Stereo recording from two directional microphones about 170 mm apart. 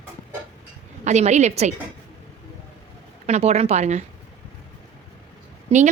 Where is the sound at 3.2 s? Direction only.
40° right (ahead or behind).